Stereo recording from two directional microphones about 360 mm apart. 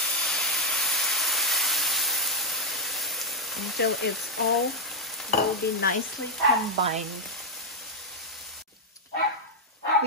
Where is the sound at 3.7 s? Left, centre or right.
Left.